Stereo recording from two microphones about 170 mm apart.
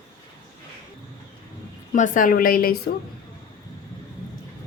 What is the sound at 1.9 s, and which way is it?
Speech, 50° left (ahead or behind).